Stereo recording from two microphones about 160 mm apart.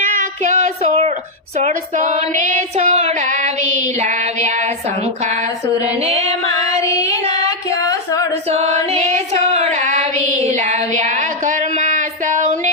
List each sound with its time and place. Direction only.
0.2 s a sound: 50° right (ahead or behind)
1.5 s female singing: 40° right (ahead or behind)
5.8 s female singing: 40° right (ahead or behind)
6.8 s child singing: 20° left (ahead or behind)
7.9 s a sound: 20° left (ahead or behind)
8.4 s female singing: 40° right (ahead or behind)